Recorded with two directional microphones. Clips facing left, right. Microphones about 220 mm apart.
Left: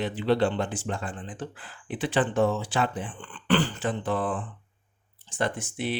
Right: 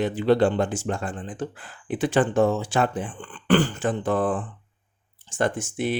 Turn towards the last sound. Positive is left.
turn(degrees=-45)  # may be behind; listen again after turning